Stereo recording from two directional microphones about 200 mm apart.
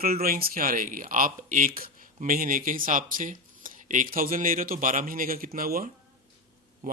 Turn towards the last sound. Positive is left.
turn(degrees=-45)  # may be behind; listen again after turning